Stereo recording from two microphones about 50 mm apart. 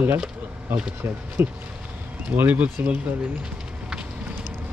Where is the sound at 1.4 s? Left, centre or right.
Right.